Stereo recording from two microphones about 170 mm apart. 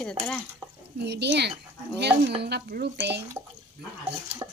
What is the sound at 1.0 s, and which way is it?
Speech, 80° right.